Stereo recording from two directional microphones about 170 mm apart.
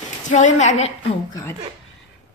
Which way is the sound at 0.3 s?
45° left (ahead or behind).